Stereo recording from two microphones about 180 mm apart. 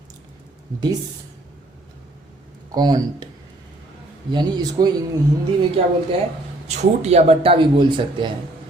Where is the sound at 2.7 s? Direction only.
20° right (ahead or behind).